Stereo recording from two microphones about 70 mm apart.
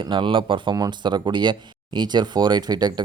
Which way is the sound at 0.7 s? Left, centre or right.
Right.